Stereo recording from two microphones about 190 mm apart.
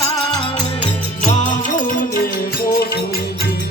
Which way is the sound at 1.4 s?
40° left (ahead or behind).